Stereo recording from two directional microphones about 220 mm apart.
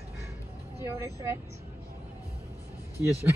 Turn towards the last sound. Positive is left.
turn(degrees=-10)  # may be behind; listen again after turning